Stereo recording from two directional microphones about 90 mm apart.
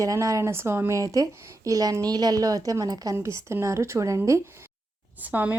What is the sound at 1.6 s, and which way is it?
A woman's voice, 40° right (ahead or behind).